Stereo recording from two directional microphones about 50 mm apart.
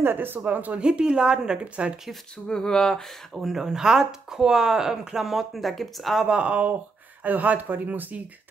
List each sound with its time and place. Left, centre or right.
0.0 s speech: right
0.7 s speech: centre
1.6 s speech: right
2.3 s a sound: centre
3.3 s speech: centre
6.2 s speech: right